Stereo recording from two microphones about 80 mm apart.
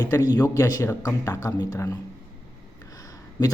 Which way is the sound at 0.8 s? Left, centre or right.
Left.